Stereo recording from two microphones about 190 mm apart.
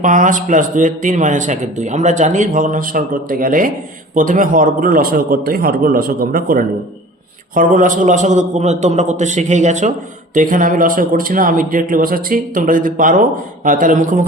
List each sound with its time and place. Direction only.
0.0 s a man's voice: 40° right (ahead or behind)